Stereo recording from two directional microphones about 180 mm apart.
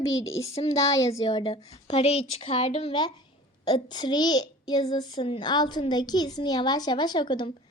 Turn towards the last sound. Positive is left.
turn(degrees=25)  # may be behind; listen again after turning